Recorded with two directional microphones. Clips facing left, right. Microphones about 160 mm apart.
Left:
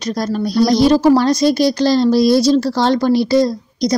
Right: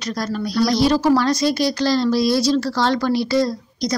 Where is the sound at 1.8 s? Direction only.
25° left (ahead or behind).